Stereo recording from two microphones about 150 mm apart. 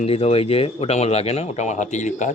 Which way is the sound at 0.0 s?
40° left (ahead or behind).